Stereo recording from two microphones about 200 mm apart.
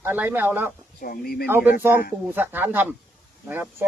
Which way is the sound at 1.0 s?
50° left (ahead or behind).